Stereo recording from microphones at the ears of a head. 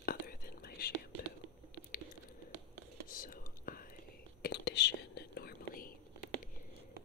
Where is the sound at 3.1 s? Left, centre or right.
Left.